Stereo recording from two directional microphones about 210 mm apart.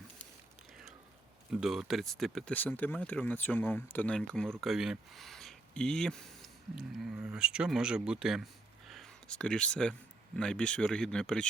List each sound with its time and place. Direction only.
1.6 s speech: centre (ahead or behind)